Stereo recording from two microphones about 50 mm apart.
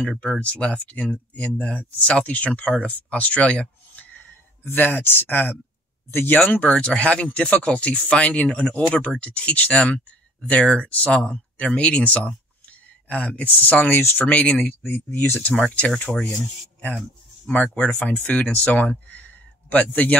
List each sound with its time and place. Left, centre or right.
0.2 s speech: left
4.6 s speech: left
6.7 s speech: left
14.2 s speech: left
15.0 s speech: left
15.6 s speech: left
17.5 s speech: left